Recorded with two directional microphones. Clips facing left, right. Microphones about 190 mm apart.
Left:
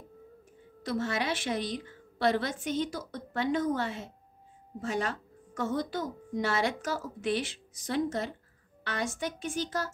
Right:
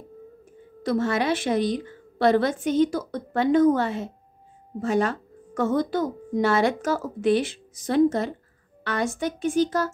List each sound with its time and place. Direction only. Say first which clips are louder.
0.8 s speech: right 8 dB; 50° right (ahead or behind)